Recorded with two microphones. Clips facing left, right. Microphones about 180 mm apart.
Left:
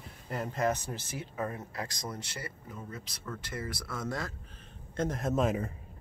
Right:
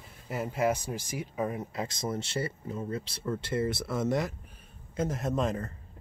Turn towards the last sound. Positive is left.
turn(degrees=5)  # may be behind; listen again after turning